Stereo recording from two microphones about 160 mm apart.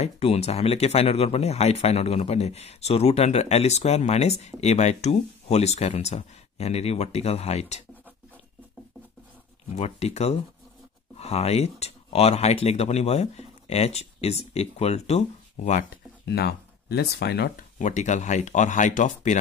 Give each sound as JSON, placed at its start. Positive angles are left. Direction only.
{"t": 0.0, "sound": "speech", "side_deg": 40}
{"t": 9.8, "sound": "speech", "side_deg": 40}
{"t": 16.3, "sound": "speech", "side_deg": 85}
{"t": 17.7, "sound": "speech", "side_deg": 50}